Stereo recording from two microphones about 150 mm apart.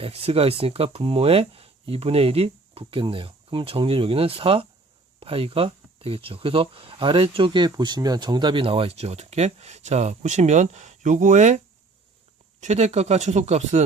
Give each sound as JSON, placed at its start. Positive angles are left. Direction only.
{"t": 0.0, "sound": "speech", "side_deg": -40}